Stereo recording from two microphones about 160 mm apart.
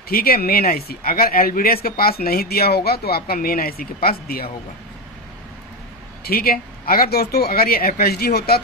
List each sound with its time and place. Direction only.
0.1 s speech: 70° left (ahead or behind)
6.2 s speech: 70° left (ahead or behind)